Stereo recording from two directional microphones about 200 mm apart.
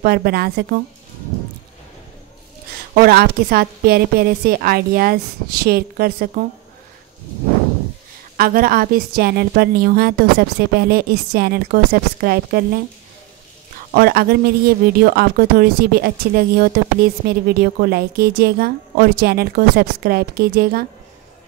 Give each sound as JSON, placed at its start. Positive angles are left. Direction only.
{"t": 0.0, "sound": "speech", "side_deg": -50}
{"t": 2.9, "sound": "speech", "side_deg": -50}
{"t": 8.4, "sound": "speech", "side_deg": -45}
{"t": 13.9, "sound": "speech", "side_deg": -50}